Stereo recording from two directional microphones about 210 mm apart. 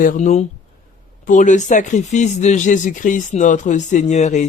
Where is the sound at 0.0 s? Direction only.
40° left (ahead or behind).